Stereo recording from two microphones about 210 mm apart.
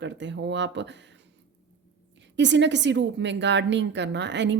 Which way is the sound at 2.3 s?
55° right (ahead or behind).